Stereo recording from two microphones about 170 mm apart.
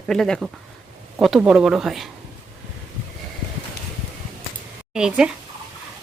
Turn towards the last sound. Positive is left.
turn(degrees=-5)  # may be behind; listen again after turning